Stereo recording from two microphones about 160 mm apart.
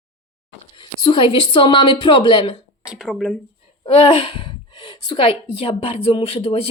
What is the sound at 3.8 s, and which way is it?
A woman's voice, 35° left (ahead or behind).